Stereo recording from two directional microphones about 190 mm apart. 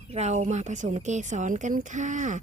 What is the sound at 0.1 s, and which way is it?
Speech, 35° right (ahead or behind).